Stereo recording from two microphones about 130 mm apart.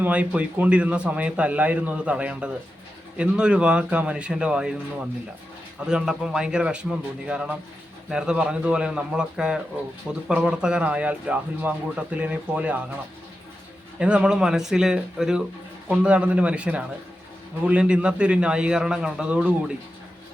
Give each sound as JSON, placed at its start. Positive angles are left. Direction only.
{"t": 0.0, "sound": "speech", "side_deg": -10}
{"t": 14.0, "sound": "speech", "side_deg": -10}